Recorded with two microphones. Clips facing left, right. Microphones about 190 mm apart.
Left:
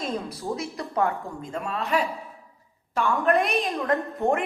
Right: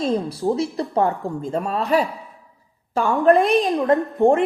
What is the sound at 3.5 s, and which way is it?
Speech, 35° right (ahead or behind).